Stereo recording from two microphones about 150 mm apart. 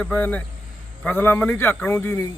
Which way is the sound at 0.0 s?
10° left (ahead or behind).